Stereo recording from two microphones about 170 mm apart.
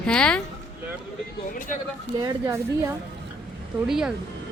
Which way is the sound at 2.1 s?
20° right (ahead or behind).